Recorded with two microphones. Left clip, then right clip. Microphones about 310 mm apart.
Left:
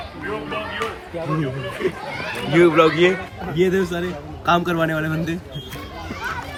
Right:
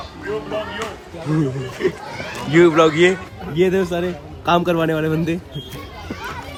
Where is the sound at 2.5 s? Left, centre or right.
Centre.